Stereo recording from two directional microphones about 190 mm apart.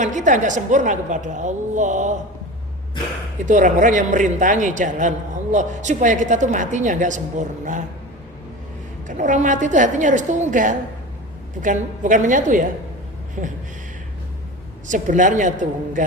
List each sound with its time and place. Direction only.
0.0 s a man's voice: 40° right (ahead or behind)
3.4 s a man's voice: 40° right (ahead or behind)
9.0 s a man's voice: 40° right (ahead or behind)
14.8 s a man's voice: 40° right (ahead or behind)